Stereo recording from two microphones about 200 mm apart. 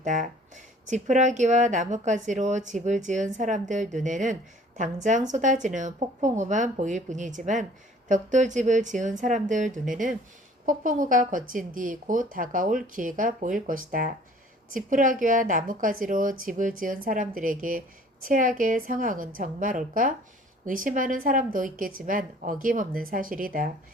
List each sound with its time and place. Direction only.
0.0 s a woman's voice: 40° right (ahead or behind)